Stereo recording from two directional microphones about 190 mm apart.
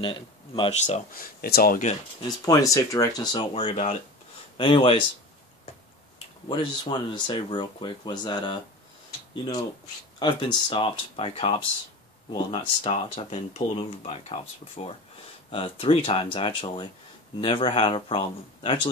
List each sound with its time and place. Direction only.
0.0 s speech: 25° left (ahead or behind)
0.8 s speech: 45° left (ahead or behind)
2.2 s speech: 20° left (ahead or behind)
3.5 s speech: 30° left (ahead or behind)
6.5 s speech: 25° left (ahead or behind)